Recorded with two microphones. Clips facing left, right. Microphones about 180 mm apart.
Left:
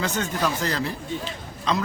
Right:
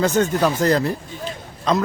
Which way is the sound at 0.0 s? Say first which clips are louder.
Right 8 dB; 45° right (ahead or behind).